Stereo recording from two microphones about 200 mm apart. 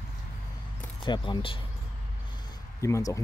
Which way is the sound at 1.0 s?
25° left (ahead or behind).